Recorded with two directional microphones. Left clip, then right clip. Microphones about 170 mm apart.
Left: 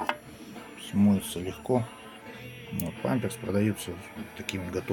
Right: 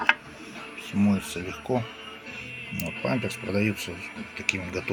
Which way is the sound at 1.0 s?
15° left (ahead or behind).